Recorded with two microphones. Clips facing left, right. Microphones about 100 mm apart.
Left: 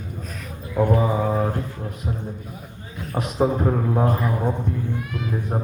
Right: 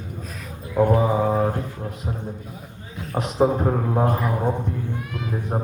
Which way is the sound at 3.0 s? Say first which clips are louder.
Even; centre (ahead or behind).